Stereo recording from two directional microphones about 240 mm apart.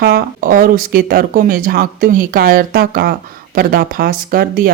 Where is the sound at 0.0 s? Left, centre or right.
Right.